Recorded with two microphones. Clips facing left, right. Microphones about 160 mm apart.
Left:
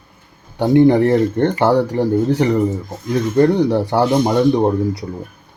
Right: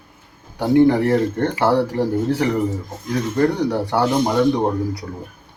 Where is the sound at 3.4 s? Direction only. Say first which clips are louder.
Left 5 dB; 25° left (ahead or behind).